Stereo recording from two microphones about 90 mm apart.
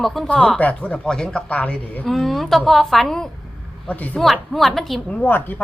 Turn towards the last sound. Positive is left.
turn(degrees=20)  # may be behind; listen again after turning